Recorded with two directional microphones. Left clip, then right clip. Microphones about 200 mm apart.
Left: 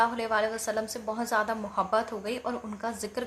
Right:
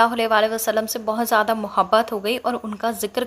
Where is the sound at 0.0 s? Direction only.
45° right (ahead or behind).